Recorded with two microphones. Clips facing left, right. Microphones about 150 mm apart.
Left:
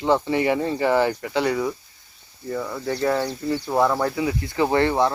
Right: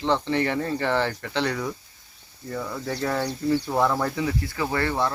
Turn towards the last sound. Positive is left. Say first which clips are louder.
# left 6 dB
turn(degrees=20)  # may be behind; listen again after turning